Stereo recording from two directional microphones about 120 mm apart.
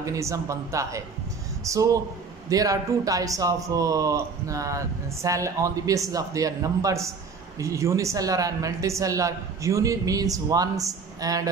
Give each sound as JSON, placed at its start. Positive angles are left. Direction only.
{"t": 0.0, "sound": "speech", "side_deg": -25}